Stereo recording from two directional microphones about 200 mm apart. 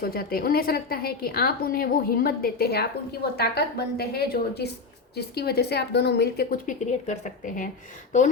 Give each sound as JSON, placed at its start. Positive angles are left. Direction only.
{"t": 0.0, "sound": "a woman's voice", "side_deg": 50}